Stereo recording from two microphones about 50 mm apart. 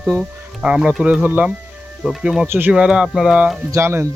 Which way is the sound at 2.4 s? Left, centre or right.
Right.